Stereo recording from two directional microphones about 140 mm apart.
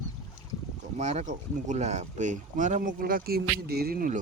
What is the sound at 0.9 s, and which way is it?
Speech, 55° right (ahead or behind).